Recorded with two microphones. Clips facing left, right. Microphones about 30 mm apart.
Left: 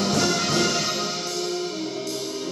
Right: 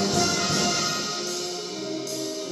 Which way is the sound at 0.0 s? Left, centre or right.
Centre.